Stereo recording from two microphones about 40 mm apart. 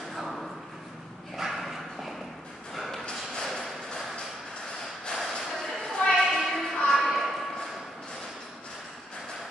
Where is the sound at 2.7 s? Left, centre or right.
Centre.